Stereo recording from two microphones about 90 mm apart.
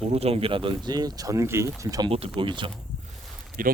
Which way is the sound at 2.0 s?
80° right.